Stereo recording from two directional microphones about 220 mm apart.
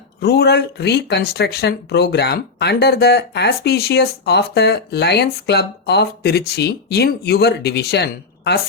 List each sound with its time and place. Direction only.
0.2 s speech: 45° left (ahead or behind)